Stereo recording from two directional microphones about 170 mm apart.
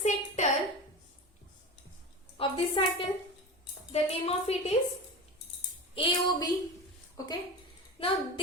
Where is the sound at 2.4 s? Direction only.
35° left (ahead or behind).